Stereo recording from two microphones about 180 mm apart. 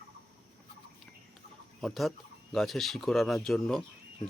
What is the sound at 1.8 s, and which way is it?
Speech, centre (ahead or behind).